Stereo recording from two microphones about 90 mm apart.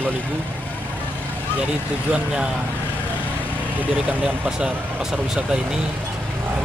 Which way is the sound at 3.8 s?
20° right (ahead or behind).